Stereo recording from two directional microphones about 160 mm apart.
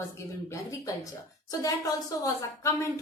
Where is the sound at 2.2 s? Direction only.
20° left (ahead or behind).